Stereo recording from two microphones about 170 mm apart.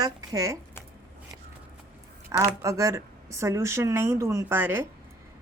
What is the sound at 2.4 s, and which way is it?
Speech, 20° right (ahead or behind).